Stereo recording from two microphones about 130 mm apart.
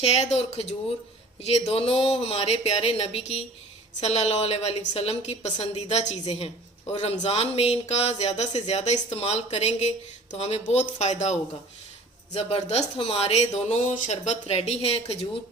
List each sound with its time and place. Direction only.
0.0 s speech: 55° left (ahead or behind)
14.4 s speech: 50° left (ahead or behind)